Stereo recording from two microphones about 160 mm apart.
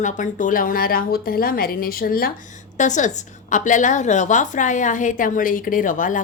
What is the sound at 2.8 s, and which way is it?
A woman's voice, 50° left (ahead or behind).